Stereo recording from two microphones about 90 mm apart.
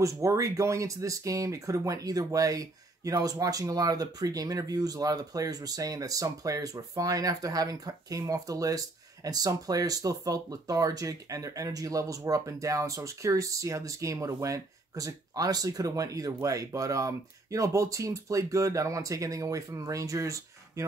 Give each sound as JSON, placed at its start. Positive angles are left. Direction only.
{"t": 0.0, "sound": "speech", "side_deg": -35}